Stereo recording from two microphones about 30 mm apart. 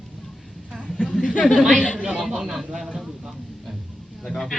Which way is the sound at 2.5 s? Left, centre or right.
Centre.